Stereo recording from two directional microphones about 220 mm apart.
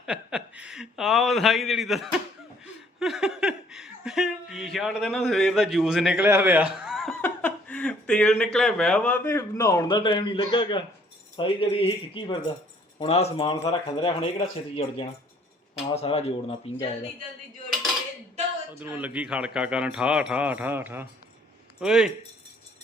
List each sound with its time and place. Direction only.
0.0 s a man's voice: 5° right (ahead or behind); by 16.7 s 25° left (ahead or behind)
18.7 s speech: 10° right (ahead or behind)